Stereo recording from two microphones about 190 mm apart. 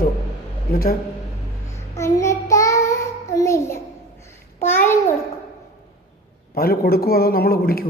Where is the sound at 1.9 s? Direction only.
15° left (ahead or behind).